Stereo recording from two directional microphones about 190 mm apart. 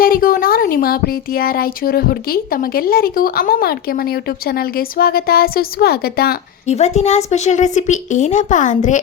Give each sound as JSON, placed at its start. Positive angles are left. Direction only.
{"t": 0.0, "sound": "speech", "side_deg": 50}
{"t": 6.7, "sound": "a woman's voice", "side_deg": 35}